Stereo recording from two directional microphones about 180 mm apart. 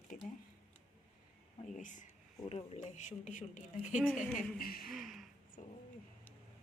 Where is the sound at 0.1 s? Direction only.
45° left (ahead or behind).